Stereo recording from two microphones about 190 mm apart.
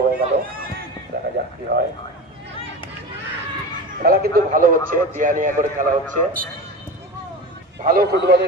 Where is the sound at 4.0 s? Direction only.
50° right (ahead or behind).